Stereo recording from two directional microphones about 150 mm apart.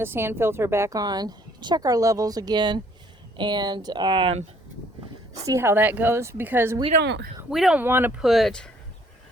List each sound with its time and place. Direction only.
0.0 s a woman's voice: 15° right (ahead or behind); by 4.4 s 35° right (ahead or behind)
5.4 s a woman's voice: 20° right (ahead or behind)
7.5 s speech: centre (ahead or behind)
7.8 s a woman's voice: 15° right (ahead or behind)
8.2 s speech: centre (ahead or behind)